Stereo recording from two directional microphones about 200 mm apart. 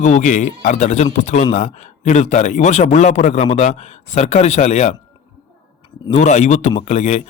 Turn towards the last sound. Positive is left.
turn(degrees=35)  # may be behind; listen again after turning